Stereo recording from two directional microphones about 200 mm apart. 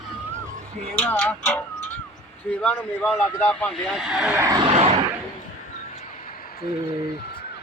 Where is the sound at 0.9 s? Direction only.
10° left (ahead or behind); by 4.6 s 15° right (ahead or behind).